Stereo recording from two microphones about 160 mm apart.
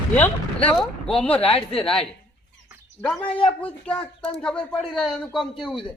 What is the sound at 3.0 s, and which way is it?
Speech, centre (ahead or behind).